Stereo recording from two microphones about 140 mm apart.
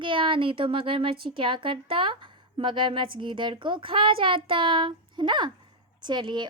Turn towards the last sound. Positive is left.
turn(degrees=-30)  # may be behind; listen again after turning